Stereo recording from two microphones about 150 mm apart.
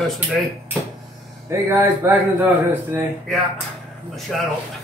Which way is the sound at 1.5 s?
15° right (ahead or behind).